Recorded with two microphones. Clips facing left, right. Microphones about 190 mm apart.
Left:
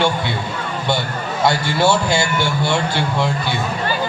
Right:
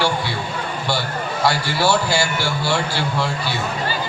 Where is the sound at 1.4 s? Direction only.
20° left (ahead or behind).